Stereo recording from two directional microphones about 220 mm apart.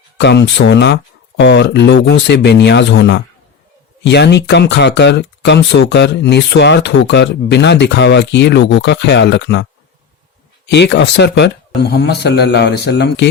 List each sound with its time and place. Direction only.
0.2 s speech: 50° left (ahead or behind)
10.7 s speech: 50° left (ahead or behind)